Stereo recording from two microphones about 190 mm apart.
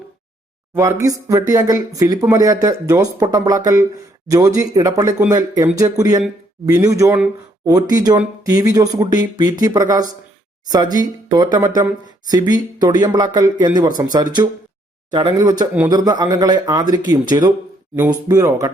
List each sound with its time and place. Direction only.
0.7 s speech: 15° right (ahead or behind)